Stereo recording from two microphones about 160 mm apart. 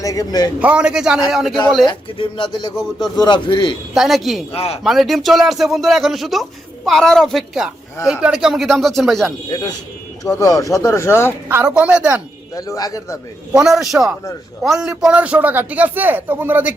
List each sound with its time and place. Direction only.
0.0 s speech: 20° left (ahead or behind)
0.6 s speech: 5° right (ahead or behind)
1.9 s speech: 30° left (ahead or behind)
3.9 s speech: centre (ahead or behind)
4.5 s speech: 40° left (ahead or behind)
4.8 s speech: centre (ahead or behind)
9.5 s speech: 25° left (ahead or behind)
11.4 s a man's voice: 10° right (ahead or behind)
12.5 s speech: 20° left (ahead or behind)
13.6 s a man's voice: 5° right (ahead or behind)